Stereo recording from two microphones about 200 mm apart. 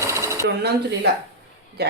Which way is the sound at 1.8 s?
55° right (ahead or behind).